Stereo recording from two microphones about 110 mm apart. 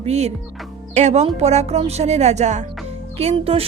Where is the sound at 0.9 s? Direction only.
90° right.